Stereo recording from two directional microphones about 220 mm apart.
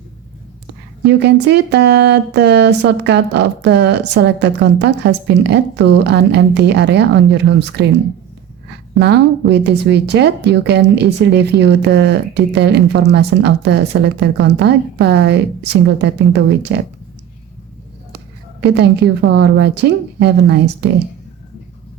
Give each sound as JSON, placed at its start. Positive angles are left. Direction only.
{"t": 1.0, "sound": "a woman's voice", "side_deg": -50}
{"t": 9.0, "sound": "a woman's voice", "side_deg": -50}
{"t": 18.6, "sound": "a woman's voice", "side_deg": -50}